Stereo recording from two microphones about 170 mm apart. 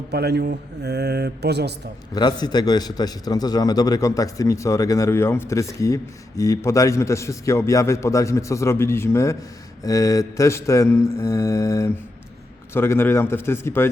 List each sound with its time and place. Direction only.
0.1 s speech: 75° right (ahead or behind)
2.1 s a man's voice: 25° left (ahead or behind)